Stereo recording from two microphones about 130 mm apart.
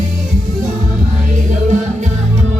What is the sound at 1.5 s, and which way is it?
Music, 70° right (ahead or behind).